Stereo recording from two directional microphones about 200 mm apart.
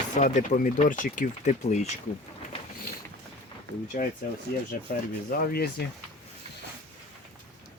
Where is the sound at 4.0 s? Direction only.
40° left (ahead or behind).